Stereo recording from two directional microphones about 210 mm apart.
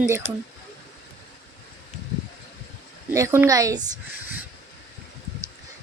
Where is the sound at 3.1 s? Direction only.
15° right (ahead or behind).